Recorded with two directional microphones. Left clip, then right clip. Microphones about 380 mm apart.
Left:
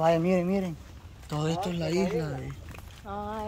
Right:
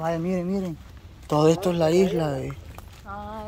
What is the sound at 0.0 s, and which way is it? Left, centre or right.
Speech, centre.